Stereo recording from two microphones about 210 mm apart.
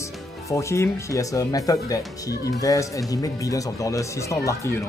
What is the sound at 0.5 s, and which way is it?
Speech, 15° left (ahead or behind).